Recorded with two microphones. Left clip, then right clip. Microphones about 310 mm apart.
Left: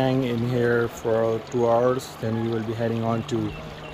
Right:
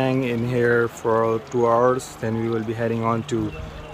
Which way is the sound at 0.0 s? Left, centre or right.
Centre.